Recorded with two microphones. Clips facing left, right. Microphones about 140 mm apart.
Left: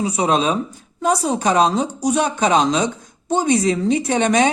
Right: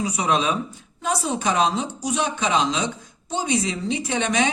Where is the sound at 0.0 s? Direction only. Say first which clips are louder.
Left 4 dB; 35° left (ahead or behind).